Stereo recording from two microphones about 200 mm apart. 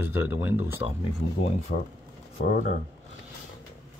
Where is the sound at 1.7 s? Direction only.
45° left (ahead or behind).